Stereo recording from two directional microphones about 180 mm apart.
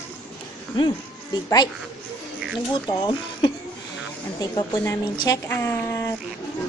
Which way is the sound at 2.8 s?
25° left (ahead or behind).